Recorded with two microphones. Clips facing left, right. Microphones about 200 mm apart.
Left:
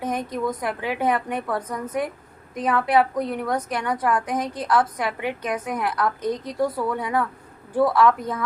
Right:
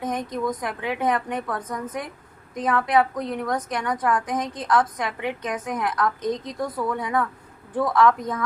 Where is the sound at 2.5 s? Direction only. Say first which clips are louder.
Left 1 dB; 10° left (ahead or behind).